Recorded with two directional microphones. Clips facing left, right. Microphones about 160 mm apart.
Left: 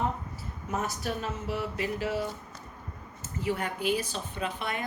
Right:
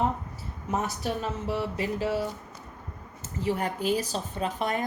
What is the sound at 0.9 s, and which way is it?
Speech, 35° right (ahead or behind).